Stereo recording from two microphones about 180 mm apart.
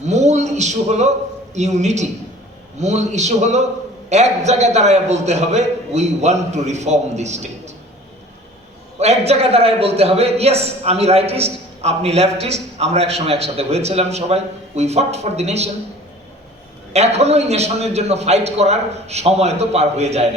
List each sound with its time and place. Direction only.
0.0 s a man's voice: 40° right (ahead or behind)
9.0 s a man's voice: 35° right (ahead or behind)
16.9 s a man's voice: 35° right (ahead or behind)